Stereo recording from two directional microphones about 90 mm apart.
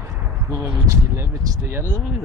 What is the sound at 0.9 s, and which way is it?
Speech, 30° right (ahead or behind).